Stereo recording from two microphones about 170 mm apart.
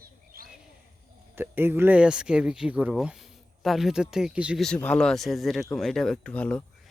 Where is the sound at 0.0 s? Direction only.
60° right (ahead or behind).